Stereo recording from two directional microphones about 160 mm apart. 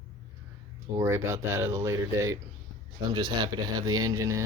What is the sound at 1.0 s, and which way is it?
Speech, 15° right (ahead or behind).